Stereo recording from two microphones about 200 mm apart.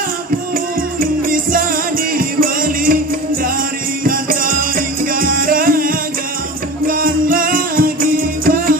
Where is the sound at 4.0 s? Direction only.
45° right (ahead or behind).